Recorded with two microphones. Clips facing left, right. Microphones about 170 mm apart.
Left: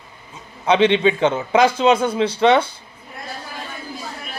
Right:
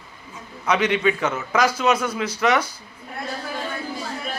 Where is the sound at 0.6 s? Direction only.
30° left (ahead or behind).